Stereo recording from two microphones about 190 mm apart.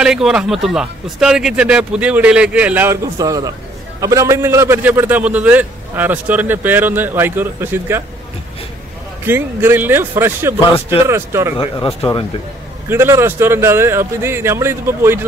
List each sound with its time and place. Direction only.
0.0 s a man's voice: 5° right (ahead or behind)
9.2 s a man's voice: 10° right (ahead or behind)
11.5 s speech: 25° left (ahead or behind)
12.9 s a man's voice: 15° right (ahead or behind)